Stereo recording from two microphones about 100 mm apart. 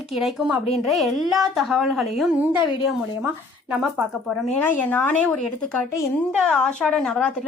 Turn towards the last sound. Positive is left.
turn(degrees=5)  # may be behind; listen again after turning